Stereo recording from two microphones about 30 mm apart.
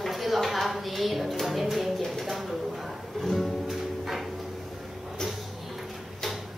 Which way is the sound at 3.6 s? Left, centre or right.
Centre.